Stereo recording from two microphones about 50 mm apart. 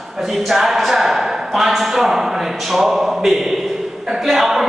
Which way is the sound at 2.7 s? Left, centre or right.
Centre.